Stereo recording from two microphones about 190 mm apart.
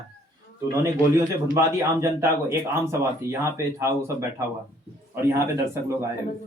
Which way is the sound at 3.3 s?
15° right (ahead or behind).